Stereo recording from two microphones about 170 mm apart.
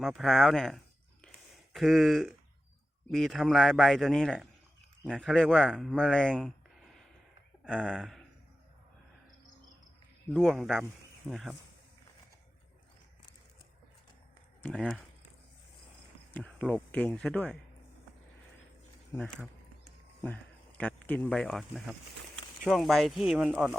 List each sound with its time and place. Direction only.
0.0 s a man's voice: centre (ahead or behind)
1.2 s a sound: centre (ahead or behind)
3.1 s a man's voice: centre (ahead or behind)
7.6 s a sound: 5° left (ahead or behind)
7.9 s a man's voice: centre (ahead or behind)
10.3 s a man's voice: centre (ahead or behind)
14.6 s speech: 5° left (ahead or behind)
16.3 s speech: 10° left (ahead or behind)
19.1 s a man's voice: 10° left (ahead or behind)